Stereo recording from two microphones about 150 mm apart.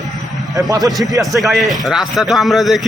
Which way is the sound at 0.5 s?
20° right (ahead or behind).